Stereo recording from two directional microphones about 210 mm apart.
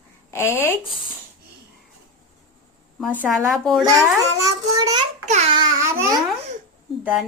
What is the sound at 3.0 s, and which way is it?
Speech, 5° right (ahead or behind).